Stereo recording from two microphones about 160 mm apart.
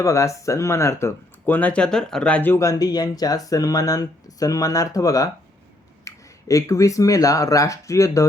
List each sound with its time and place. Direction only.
0.0 s speech: 20° left (ahead or behind)